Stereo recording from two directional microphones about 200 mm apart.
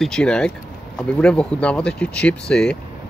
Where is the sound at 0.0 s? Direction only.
5° left (ahead or behind).